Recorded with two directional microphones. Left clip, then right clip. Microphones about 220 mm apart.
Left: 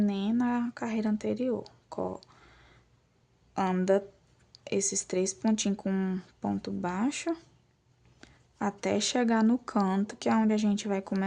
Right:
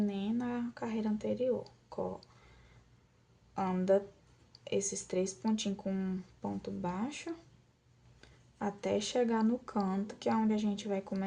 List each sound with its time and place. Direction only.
0.0 s speech: 45° left (ahead or behind)
3.5 s speech: 45° left (ahead or behind)